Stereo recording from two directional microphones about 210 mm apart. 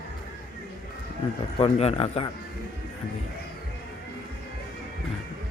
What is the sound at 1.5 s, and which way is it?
Speech, 30° left (ahead or behind).